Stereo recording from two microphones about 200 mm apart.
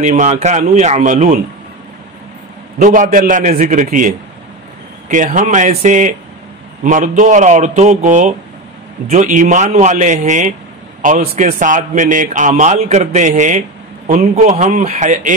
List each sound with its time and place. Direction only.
0.0 s a man's voice: 35° right (ahead or behind)
2.8 s a man's voice: 40° right (ahead or behind)